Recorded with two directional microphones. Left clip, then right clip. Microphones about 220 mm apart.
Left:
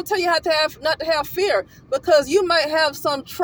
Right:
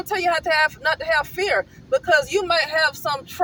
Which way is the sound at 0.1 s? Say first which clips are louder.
Left 1 dB; 30° left (ahead or behind).